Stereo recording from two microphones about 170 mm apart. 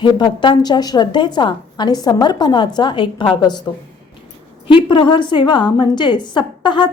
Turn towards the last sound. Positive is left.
turn(degrees=25)  # may be behind; listen again after turning